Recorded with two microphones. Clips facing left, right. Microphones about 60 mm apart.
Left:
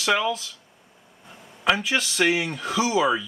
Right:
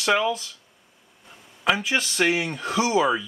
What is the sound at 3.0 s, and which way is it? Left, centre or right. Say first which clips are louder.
Speech: left 1 dB; centre.